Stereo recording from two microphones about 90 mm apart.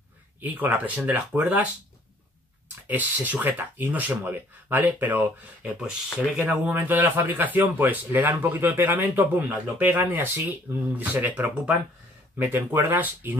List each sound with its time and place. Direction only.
0.4 s a man's voice: 20° right (ahead or behind)
2.9 s a man's voice: 20° right (ahead or behind)